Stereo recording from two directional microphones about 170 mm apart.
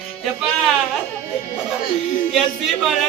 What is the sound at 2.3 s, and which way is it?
Speech, centre (ahead or behind).